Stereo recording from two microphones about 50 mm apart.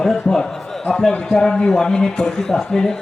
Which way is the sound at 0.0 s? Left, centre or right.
Centre.